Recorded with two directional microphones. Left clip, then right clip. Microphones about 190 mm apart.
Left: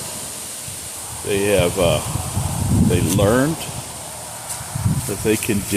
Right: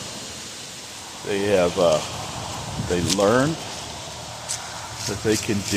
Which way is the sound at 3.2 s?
35° left (ahead or behind).